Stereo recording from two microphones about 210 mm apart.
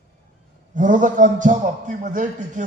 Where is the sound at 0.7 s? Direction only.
40° right (ahead or behind).